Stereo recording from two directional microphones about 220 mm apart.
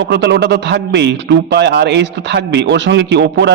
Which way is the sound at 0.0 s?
50° right (ahead or behind).